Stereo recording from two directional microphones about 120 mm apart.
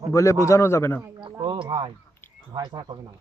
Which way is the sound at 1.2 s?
45° right (ahead or behind).